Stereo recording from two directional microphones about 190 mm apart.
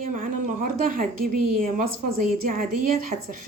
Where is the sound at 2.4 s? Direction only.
45° right (ahead or behind).